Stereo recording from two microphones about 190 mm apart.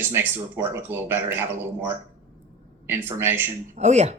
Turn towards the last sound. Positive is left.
turn(degrees=-35)  # may be behind; listen again after turning